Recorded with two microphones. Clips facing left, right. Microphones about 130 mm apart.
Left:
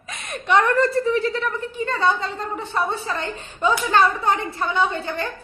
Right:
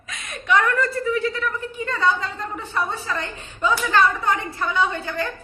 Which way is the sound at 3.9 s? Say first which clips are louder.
Left 1 dB; 25° left (ahead or behind).